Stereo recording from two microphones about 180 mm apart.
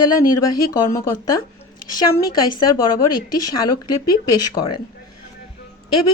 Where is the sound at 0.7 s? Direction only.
15° left (ahead or behind).